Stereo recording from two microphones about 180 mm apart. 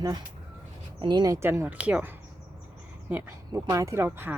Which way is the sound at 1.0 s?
20° right (ahead or behind).